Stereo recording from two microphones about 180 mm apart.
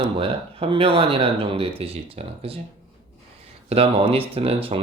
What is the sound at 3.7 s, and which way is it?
Speech, 35° right (ahead or behind).